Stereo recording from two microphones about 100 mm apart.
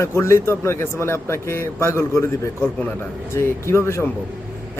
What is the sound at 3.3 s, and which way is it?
Speech, 25° left (ahead or behind).